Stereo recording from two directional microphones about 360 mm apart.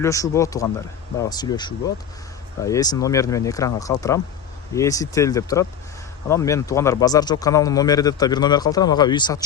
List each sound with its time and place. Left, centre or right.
0.0 s a man's voice: centre